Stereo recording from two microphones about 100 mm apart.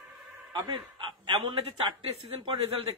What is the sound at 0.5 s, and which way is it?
A man's voice, 50° right (ahead or behind).